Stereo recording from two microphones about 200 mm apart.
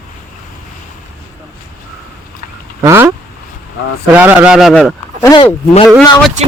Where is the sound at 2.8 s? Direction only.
15° right (ahead or behind).